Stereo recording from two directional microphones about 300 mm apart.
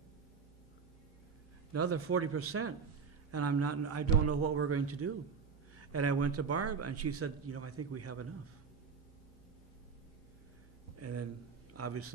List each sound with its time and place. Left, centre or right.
1.7 s speech: right
11.0 s a man's voice: right